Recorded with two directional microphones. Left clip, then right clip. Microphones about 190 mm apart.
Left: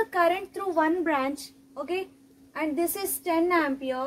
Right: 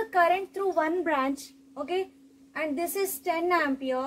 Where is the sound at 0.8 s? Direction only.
20° left (ahead or behind).